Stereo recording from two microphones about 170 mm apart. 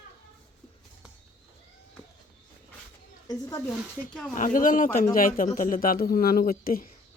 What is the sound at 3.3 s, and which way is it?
Speech, 20° left (ahead or behind).